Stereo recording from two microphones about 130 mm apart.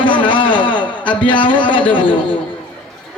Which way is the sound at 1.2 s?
40° left (ahead or behind).